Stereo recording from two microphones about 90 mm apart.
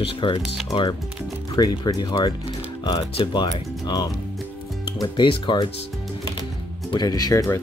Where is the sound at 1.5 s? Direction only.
50° left (ahead or behind).